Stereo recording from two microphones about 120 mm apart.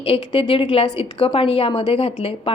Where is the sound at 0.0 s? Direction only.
50° left (ahead or behind).